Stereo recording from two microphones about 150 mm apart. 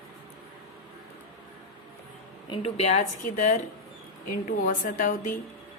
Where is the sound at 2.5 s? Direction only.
45° left (ahead or behind); by 5.4 s 60° left (ahead or behind).